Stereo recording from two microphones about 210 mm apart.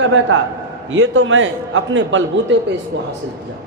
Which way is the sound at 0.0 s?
65° right (ahead or behind).